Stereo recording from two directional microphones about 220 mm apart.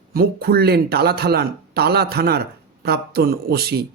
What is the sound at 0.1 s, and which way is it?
Speech, 45° right (ahead or behind).